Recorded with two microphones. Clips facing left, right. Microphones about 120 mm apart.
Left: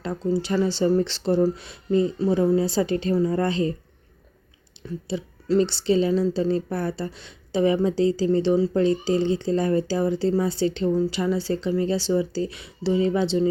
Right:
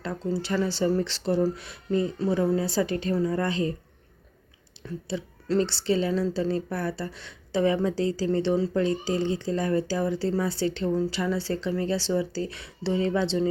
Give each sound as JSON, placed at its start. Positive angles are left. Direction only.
{"t": 0.0, "sound": "speech", "side_deg": 20}
{"t": 5.0, "sound": "speech", "side_deg": 15}
{"t": 8.7, "sound": "speech", "side_deg": 25}